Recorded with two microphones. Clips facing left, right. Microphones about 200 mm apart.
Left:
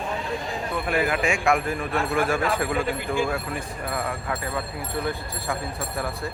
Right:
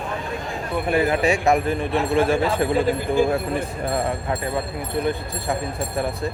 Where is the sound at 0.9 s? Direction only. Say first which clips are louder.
Right 5 dB; 30° right (ahead or behind).